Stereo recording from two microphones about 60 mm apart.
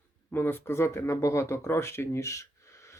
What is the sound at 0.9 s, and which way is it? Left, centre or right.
Speech, left.